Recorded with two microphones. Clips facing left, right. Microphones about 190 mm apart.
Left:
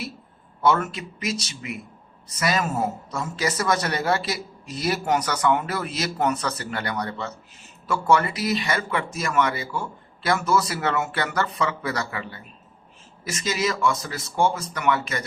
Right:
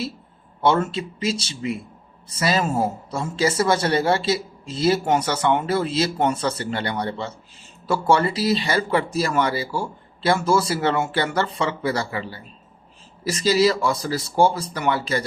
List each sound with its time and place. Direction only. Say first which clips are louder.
0.6 s speech: right 2 dB; 30° right (ahead or behind)